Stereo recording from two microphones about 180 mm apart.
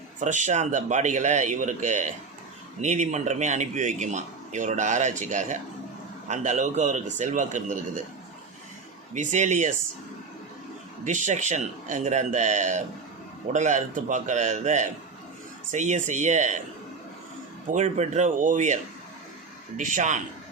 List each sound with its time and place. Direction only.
0.2 s a man's voice: 45° right (ahead or behind)
9.1 s a man's voice: 45° right (ahead or behind)
11.0 s a man's voice: 45° right (ahead or behind)
17.7 s a man's voice: 40° right (ahead or behind)